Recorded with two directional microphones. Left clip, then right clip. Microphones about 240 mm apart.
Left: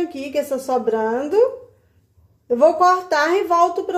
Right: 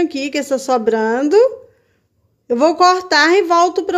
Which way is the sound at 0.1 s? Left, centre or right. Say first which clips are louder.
Right 3 dB; right.